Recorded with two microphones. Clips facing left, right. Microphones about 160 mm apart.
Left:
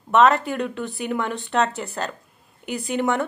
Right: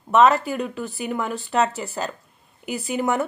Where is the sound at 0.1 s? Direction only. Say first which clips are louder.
Even; centre (ahead or behind).